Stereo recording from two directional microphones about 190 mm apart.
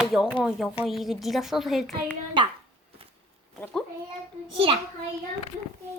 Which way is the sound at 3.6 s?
5° left (ahead or behind).